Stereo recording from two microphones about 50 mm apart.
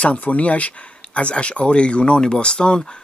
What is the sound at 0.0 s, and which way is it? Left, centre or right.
Speech, left.